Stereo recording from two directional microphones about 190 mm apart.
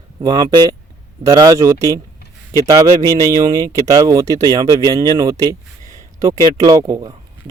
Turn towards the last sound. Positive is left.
turn(degrees=-15)  # may be behind; listen again after turning